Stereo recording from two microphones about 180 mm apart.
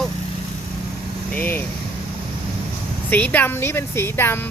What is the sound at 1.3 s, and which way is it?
Vehicle, 10° left (ahead or behind).